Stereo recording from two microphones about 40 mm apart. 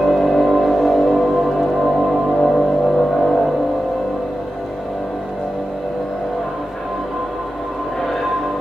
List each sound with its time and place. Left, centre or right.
0.0 s music: centre